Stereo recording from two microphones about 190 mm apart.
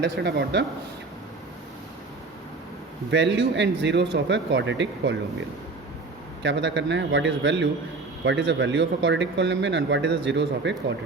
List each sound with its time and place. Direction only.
0.0 s speech: 60° right (ahead or behind)
3.1 s speech: 70° right (ahead or behind)
6.4 s speech: 70° right (ahead or behind)